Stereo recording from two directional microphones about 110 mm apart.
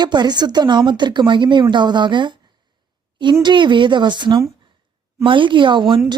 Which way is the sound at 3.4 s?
45° right (ahead or behind).